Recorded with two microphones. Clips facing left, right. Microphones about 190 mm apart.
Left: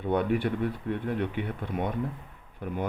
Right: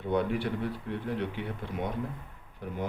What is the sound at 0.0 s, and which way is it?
Speech, 55° left (ahead or behind).